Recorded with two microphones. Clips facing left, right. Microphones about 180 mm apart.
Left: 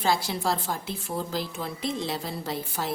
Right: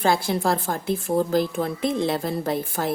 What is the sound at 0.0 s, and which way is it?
A woman's voice, 55° right (ahead or behind).